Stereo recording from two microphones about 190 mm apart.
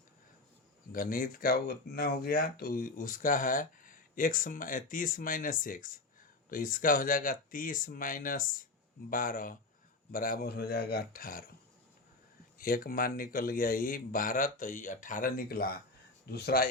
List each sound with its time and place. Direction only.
0.9 s speech: 50° left (ahead or behind)
12.5 s speech: 50° left (ahead or behind)